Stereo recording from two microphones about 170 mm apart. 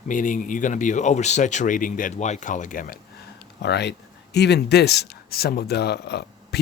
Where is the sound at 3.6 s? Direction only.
85° left.